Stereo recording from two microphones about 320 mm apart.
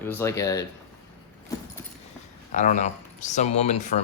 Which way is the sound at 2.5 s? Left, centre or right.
Left.